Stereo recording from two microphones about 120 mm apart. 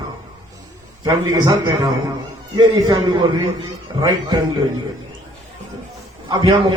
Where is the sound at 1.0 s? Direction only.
30° right (ahead or behind).